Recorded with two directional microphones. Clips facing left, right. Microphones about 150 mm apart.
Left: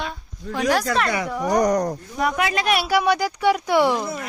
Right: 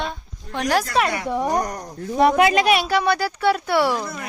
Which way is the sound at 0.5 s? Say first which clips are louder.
Even; centre (ahead or behind).